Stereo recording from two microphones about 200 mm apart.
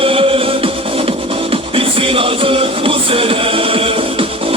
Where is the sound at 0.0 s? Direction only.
25° right (ahead or behind).